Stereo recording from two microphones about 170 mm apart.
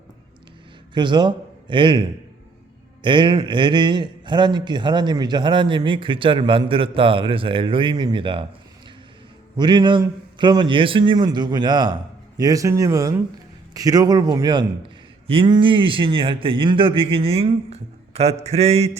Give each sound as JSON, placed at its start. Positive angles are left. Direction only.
{"t": 0.9, "sound": "a man's voice", "side_deg": -25}
{"t": 9.6, "sound": "a man's voice", "side_deg": -25}